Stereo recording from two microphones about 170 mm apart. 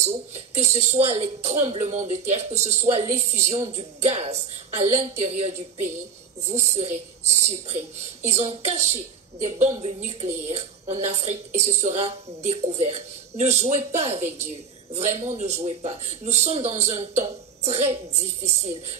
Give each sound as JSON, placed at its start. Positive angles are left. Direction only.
{"t": 0.0, "sound": "speech", "side_deg": -40}